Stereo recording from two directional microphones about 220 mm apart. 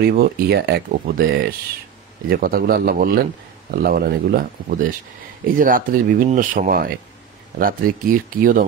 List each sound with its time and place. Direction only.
0.0 s speech: 45° right (ahead or behind)